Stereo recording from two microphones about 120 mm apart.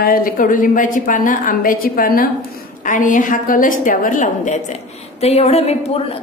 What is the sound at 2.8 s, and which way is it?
A woman's voice, 90° left.